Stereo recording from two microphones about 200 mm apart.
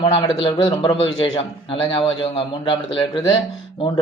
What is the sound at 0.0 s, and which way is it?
A man's voice, 25° left (ahead or behind).